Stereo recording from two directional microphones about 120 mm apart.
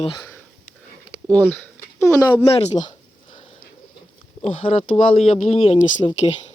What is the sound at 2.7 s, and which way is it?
Speech, 40° left (ahead or behind).